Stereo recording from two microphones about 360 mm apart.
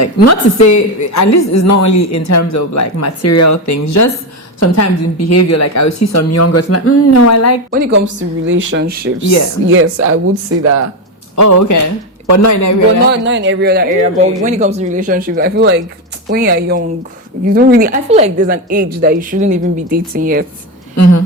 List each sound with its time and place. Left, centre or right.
0.0 s a woman's voice: left
7.7 s a woman's voice: right
11.3 s a woman's voice: left
13.1 s a woman's voice: right
20.9 s a woman's voice: left